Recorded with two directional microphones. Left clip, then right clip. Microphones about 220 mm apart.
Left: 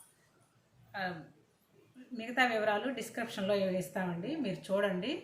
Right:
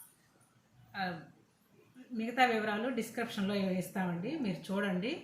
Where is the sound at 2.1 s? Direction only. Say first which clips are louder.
Right 1 dB; 45° left (ahead or behind).